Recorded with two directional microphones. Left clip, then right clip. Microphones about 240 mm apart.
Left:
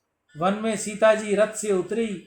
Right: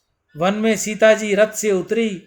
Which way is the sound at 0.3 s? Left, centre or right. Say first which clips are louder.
Right 6 dB; right.